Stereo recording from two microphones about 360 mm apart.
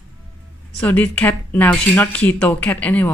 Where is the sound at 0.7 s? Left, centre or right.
Centre.